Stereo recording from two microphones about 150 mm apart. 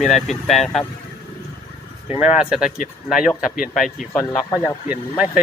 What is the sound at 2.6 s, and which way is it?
Speech, 60° left (ahead or behind).